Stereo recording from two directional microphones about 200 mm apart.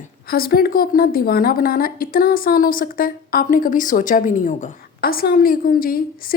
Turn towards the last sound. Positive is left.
turn(degrees=45)  # may be behind; listen again after turning